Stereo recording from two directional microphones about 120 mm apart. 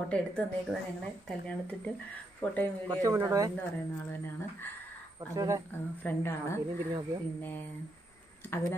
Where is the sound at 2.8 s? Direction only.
30° right (ahead or behind).